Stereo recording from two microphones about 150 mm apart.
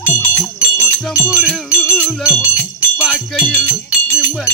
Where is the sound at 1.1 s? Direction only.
15° left (ahead or behind).